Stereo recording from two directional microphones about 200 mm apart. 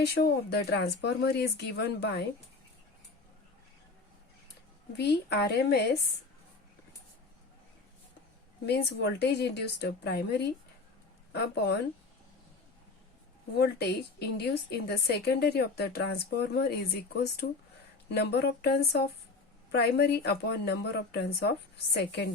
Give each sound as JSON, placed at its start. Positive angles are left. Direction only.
{"t": 0.1, "sound": "speech", "side_deg": 55}
{"t": 4.9, "sound": "speech", "side_deg": 55}
{"t": 8.6, "sound": "speech", "side_deg": 55}
{"t": 13.6, "sound": "a woman's voice", "side_deg": 55}